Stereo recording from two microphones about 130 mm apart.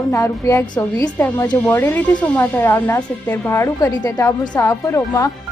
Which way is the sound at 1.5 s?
10° left (ahead or behind).